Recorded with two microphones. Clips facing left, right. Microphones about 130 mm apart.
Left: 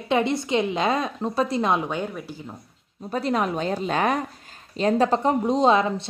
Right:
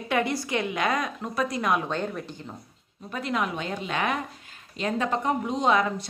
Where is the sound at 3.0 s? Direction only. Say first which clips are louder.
Left 5 dB; 35° left (ahead or behind).